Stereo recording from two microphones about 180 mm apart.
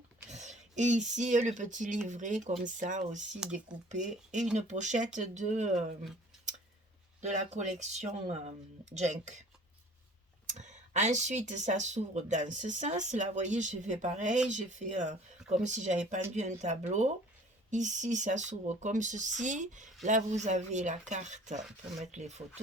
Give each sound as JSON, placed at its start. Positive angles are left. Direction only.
{"t": 0.3, "sound": "speech", "side_deg": -40}
{"t": 3.7, "sound": "speech", "side_deg": -5}
{"t": 4.5, "sound": "speech", "side_deg": -40}
{"t": 7.2, "sound": "speech", "side_deg": -40}
{"t": 10.5, "sound": "speech", "side_deg": -40}